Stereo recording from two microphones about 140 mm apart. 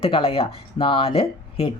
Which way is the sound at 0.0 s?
40° left (ahead or behind).